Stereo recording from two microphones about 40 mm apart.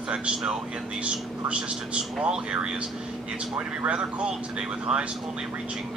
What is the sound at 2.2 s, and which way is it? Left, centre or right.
Speech, right.